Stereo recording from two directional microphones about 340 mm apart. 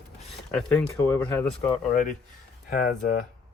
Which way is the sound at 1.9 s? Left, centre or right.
Left.